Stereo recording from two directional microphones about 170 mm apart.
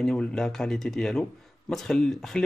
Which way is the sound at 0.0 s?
5° left (ahead or behind).